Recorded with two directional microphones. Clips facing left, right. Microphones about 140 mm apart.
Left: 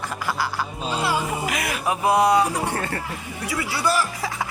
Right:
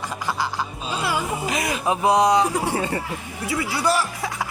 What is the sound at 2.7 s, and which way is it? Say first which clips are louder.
Music: right 3 dB; 15° right (ahead or behind).